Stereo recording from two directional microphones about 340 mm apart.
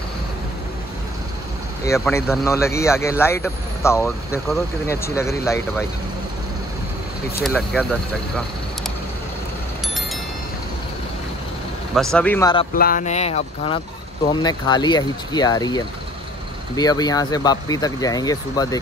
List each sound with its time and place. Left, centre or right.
1.9 s speech: centre
7.4 s speech: centre
11.9 s speech: centre
12.7 s speech: left